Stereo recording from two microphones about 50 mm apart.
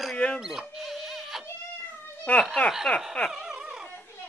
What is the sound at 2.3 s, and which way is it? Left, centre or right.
Speech, left.